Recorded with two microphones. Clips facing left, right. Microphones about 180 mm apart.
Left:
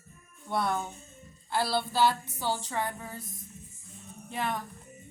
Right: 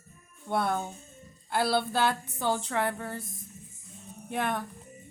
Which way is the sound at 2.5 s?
65° right (ahead or behind).